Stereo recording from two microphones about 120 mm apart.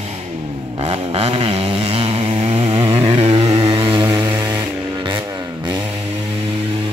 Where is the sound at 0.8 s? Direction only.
55° right (ahead or behind).